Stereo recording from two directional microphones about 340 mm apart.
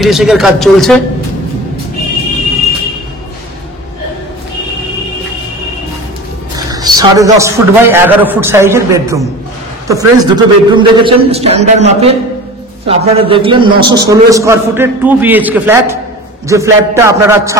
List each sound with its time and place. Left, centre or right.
0.0 s speech: centre
6.7 s a man's voice: centre